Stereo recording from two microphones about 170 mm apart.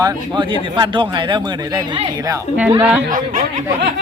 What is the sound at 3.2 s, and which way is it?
Speech, 50° right (ahead or behind).